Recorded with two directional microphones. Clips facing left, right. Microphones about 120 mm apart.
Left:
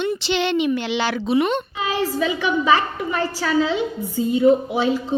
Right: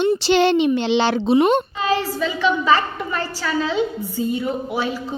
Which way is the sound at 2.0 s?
15° left (ahead or behind).